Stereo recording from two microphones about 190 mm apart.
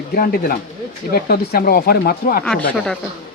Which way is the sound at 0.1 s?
50° left (ahead or behind).